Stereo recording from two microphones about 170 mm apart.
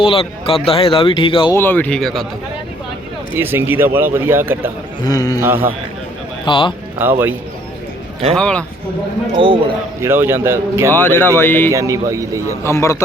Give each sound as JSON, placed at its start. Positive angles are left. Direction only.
{"t": 0.0, "sound": "speech", "side_deg": 35}
{"t": 1.5, "sound": "speech", "side_deg": 10}
{"t": 3.3, "sound": "speech", "side_deg": -15}
{"t": 5.0, "sound": "a man's voice", "side_deg": 20}
{"t": 5.4, "sound": "speech", "side_deg": -10}
{"t": 6.4, "sound": "speech", "side_deg": 30}
{"t": 7.0, "sound": "speech", "side_deg": -10}
{"t": 8.4, "sound": "speech", "side_deg": 5}
{"t": 9.4, "sound": "a man's voice", "side_deg": -30}
{"t": 10.0, "sound": "speech", "side_deg": -15}
{"t": 10.9, "sound": "speech", "side_deg": 10}
{"t": 11.7, "sound": "speech", "side_deg": -20}
{"t": 12.6, "sound": "speech", "side_deg": 15}